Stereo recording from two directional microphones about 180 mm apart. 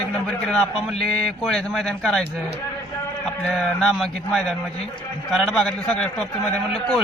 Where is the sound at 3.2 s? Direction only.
Centre (ahead or behind).